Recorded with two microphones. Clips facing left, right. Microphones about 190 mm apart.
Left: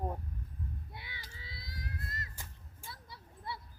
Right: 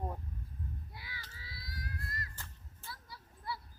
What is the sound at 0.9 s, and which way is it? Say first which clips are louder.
Speech: left 1 dB; 25° left (ahead or behind).